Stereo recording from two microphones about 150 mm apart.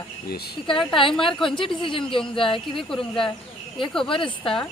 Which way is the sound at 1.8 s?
35° left (ahead or behind).